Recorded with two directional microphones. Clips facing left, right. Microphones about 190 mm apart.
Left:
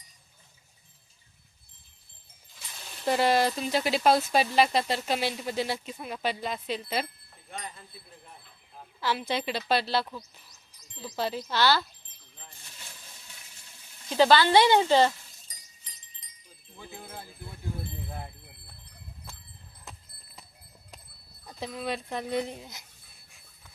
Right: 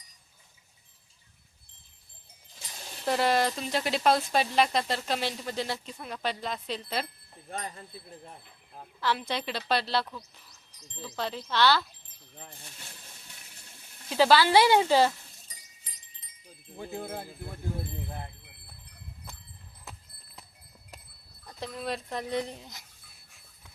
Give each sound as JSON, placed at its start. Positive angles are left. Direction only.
{"t": 3.1, "sound": "speech", "side_deg": 0}
{"t": 7.5, "sound": "wind chime", "side_deg": -45}
{"t": 9.0, "sound": "speech", "side_deg": 5}
{"t": 14.1, "sound": "speech", "side_deg": -5}
{"t": 16.7, "sound": "wind chime", "side_deg": -50}
{"t": 19.8, "sound": "clip-clop", "side_deg": 0}
{"t": 21.5, "sound": "speech", "side_deg": 0}